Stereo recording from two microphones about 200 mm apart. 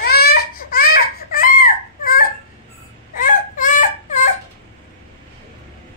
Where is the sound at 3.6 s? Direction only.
40° left (ahead or behind).